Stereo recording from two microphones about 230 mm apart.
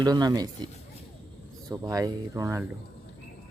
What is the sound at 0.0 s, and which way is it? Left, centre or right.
Speech, centre.